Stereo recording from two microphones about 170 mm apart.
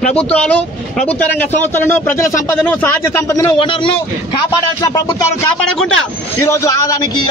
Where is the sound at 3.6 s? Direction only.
30° left (ahead or behind).